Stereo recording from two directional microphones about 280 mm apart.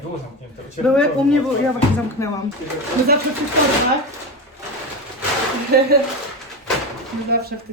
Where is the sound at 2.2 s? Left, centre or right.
Centre.